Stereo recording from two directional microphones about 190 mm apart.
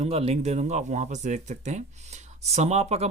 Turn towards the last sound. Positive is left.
turn(degrees=-35)  # may be behind; listen again after turning